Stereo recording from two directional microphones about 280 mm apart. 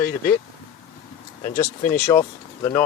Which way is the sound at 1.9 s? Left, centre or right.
Centre.